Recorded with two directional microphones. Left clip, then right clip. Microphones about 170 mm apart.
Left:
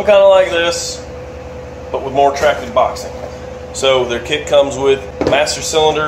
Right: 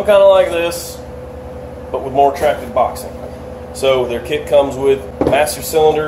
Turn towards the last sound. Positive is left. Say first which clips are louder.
# even
turn(degrees=-5)  # may be behind; listen again after turning